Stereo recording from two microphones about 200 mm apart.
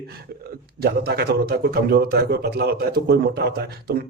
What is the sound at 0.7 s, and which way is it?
A man's voice, 50° right (ahead or behind).